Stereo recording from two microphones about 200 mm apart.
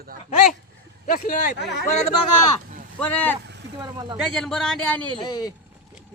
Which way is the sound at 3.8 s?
20° right (ahead or behind).